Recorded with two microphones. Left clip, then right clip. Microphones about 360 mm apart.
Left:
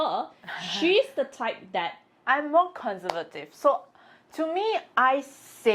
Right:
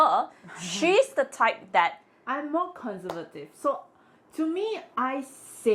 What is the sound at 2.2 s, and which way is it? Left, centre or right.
A woman's voice, left.